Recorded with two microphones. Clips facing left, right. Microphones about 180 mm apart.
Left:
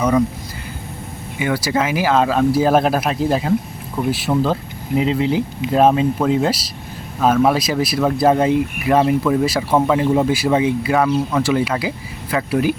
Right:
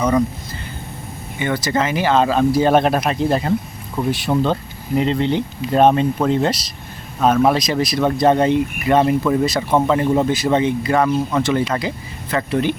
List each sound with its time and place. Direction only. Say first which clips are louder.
1.4 s speech: left 1 dB; 5° left (ahead or behind)